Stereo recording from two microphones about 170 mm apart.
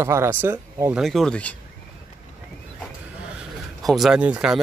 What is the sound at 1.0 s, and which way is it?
Speech, 5° left (ahead or behind).